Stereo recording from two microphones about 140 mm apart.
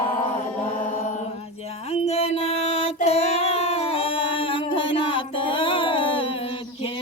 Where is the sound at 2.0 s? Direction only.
50° left (ahead or behind).